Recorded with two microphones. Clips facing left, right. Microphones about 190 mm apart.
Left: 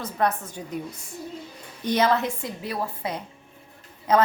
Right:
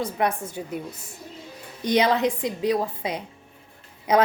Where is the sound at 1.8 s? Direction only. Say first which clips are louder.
Right 2 dB; 15° right (ahead or behind).